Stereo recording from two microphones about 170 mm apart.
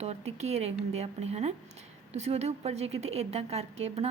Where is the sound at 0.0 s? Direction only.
40° right (ahead or behind).